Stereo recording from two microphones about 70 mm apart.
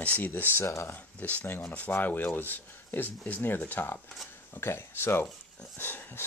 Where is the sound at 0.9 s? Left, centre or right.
Left.